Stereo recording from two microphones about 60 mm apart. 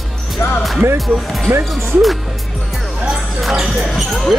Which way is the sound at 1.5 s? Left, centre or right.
Right.